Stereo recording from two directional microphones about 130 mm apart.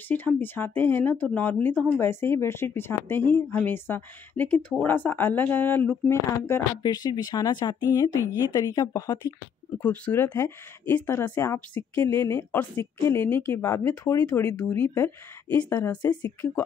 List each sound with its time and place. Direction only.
0.1 s speech: 15° left (ahead or behind)
6.8 s speech: 30° left (ahead or behind)
9.8 s speech: 15° left (ahead or behind)